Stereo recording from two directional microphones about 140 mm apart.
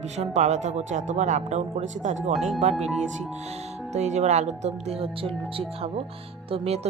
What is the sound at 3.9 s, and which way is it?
Speech, 55° right (ahead or behind).